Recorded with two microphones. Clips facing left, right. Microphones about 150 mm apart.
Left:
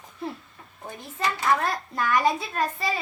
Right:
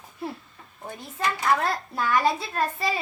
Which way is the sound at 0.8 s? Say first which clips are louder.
Even; centre (ahead or behind).